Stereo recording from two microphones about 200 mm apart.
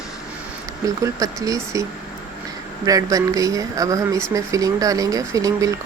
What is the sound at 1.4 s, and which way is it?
Speech, 15° right (ahead or behind).